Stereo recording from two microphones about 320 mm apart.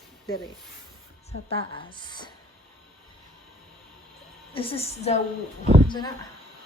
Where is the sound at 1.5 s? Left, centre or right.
Centre.